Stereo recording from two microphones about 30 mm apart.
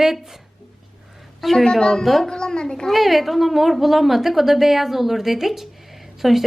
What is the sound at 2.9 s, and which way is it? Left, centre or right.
A woman's voice, centre.